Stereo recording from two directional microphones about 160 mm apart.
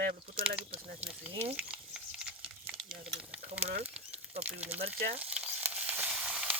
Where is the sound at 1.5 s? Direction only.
10° right (ahead or behind).